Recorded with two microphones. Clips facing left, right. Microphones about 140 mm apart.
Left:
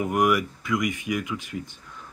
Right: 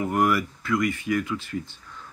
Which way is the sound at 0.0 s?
15° left (ahead or behind).